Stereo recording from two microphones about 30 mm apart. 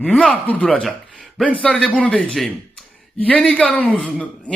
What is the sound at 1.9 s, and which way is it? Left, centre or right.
Speech, left.